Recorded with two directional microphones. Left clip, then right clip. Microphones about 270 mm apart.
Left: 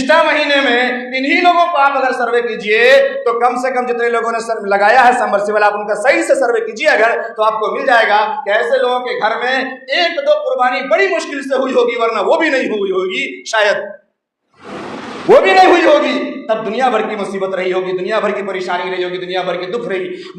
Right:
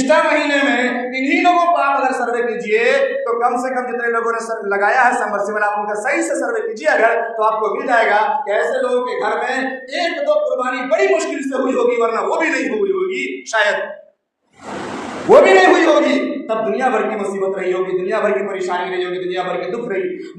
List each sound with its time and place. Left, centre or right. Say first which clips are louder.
0.1 s a woman's voice: left 4 dB; left
15.3 s a woman's voice: left 1 dB; left
17.6 s a woman's voice: left 2 dB; left